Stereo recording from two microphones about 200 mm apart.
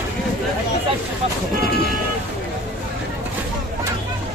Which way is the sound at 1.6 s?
50° left (ahead or behind).